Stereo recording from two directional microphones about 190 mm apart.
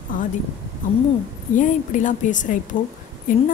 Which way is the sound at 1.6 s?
45° left (ahead or behind).